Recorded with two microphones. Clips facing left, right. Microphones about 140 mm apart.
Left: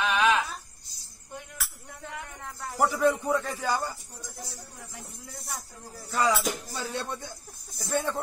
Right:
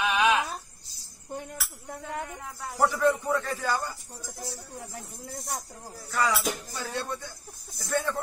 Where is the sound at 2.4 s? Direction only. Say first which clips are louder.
Even; 10° right (ahead or behind).